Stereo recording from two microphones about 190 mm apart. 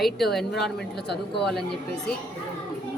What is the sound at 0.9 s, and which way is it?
Speech, 60° left (ahead or behind).